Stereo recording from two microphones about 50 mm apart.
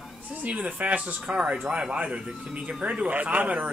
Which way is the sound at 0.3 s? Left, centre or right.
Right.